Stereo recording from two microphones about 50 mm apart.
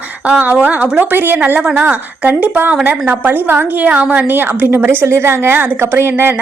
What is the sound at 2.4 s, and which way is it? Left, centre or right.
A woman's voice, right.